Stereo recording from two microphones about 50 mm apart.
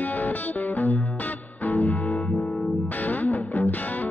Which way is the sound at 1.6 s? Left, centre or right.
Left.